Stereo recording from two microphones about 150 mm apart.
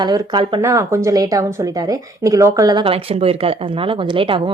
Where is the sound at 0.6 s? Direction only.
20° right (ahead or behind).